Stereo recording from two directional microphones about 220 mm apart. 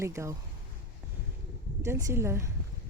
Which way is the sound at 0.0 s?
15° right (ahead or behind).